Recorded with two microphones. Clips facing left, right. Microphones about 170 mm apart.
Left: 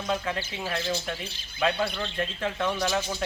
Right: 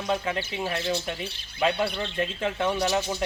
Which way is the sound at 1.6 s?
10° right (ahead or behind).